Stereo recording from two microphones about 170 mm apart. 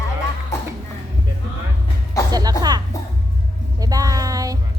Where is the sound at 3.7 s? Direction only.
20° right (ahead or behind).